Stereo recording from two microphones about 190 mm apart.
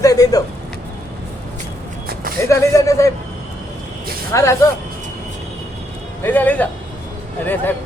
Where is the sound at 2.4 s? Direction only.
15° left (ahead or behind).